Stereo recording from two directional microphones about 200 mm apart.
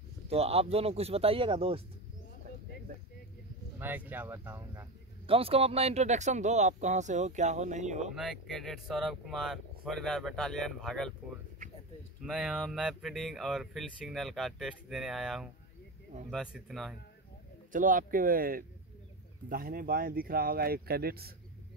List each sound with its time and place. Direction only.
0.3 s speech: 30° right (ahead or behind)
3.8 s speech: 10° right (ahead or behind)
5.2 s speech: 30° right (ahead or behind)
8.1 s speech: centre (ahead or behind)
12.3 s speech: centre (ahead or behind)
17.7 s speech: 40° right (ahead or behind)